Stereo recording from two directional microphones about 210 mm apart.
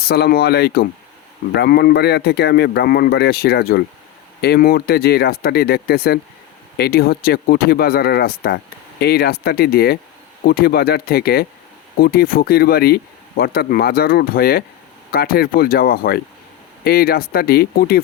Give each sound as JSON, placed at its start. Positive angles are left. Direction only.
{"t": 0.0, "sound": "speech", "side_deg": 50}